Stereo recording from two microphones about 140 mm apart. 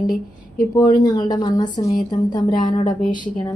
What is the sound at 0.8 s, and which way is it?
A woman's voice, 30° left (ahead or behind).